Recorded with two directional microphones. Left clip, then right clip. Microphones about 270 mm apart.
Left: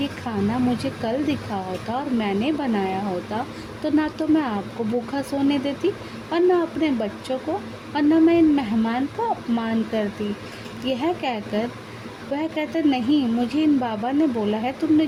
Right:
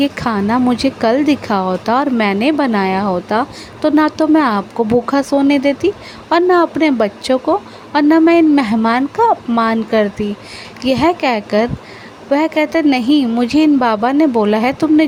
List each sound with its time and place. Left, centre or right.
0.0 s speech: right